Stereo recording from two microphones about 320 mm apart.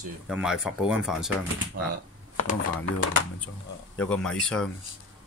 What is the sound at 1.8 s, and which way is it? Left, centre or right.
Speech, right.